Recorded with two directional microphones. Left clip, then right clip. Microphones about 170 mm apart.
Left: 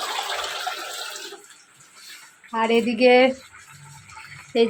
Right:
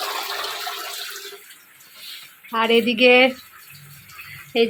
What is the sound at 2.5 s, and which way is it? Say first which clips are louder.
Speech: right 3 dB; 10° left (ahead or behind).